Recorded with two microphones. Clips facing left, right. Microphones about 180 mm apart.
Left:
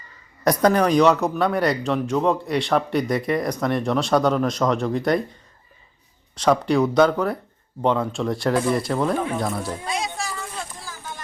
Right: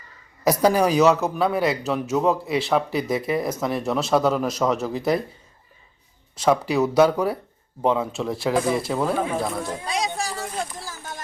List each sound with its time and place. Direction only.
0.4 s speech: 5° right (ahead or behind)
6.3 s speech: 5° right (ahead or behind)
9.8 s a sound: 35° right (ahead or behind)